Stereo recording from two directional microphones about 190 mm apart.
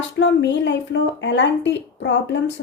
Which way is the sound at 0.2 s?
70° left (ahead or behind).